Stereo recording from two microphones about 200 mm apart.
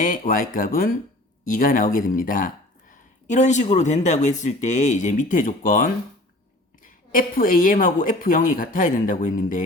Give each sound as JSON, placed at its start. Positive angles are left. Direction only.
{"t": 0.0, "sound": "a woman's voice", "side_deg": 45}